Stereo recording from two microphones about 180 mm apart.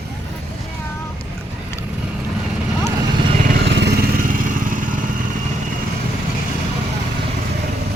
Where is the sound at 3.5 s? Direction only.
70° right (ahead or behind); by 5.1 s 45° right (ahead or behind).